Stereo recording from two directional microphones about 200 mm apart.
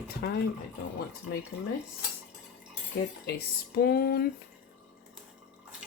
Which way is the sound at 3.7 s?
50° left (ahead or behind).